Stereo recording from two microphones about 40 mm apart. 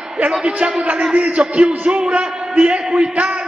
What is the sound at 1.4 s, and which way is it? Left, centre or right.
A man's voice, right.